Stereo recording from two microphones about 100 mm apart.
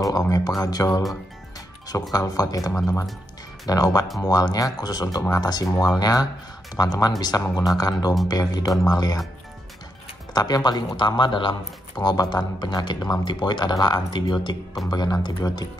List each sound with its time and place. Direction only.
0.0 s a sound: 35° left (ahead or behind)
0.6 s speech: 40° left (ahead or behind)
2.1 s speech: 40° left (ahead or behind)
10.3 s speech: 40° left (ahead or behind)